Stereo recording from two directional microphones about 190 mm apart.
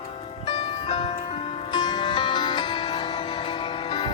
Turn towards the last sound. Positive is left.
turn(degrees=25)  # may be behind; listen again after turning